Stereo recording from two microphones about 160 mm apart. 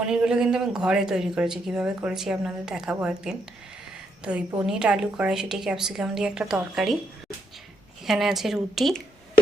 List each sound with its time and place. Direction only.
0.0 s a man's voice: 5° right (ahead or behind)
8.0 s a man's voice: centre (ahead or behind)